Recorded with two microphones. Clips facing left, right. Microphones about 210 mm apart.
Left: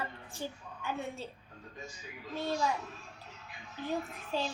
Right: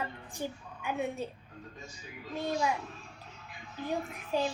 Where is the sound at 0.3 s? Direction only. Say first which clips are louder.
Right 3 dB; 15° right (ahead or behind).